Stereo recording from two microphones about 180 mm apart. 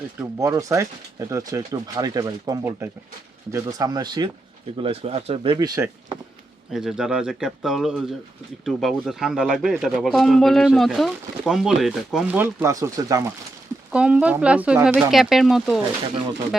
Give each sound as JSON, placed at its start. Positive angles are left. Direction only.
{"t": 0.2, "sound": "speech", "side_deg": -15}
{"t": 4.8, "sound": "speech", "side_deg": -35}
{"t": 6.7, "sound": "speech", "side_deg": 0}
{"t": 13.9, "sound": "speech", "side_deg": -5}